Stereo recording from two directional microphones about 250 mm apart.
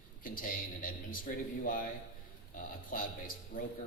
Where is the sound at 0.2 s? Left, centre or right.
Left.